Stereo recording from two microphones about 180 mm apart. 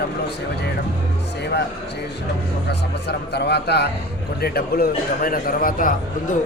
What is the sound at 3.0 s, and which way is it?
A man's voice, 65° left (ahead or behind).